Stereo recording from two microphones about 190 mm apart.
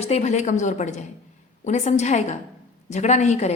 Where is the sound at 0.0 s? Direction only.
35° left (ahead or behind).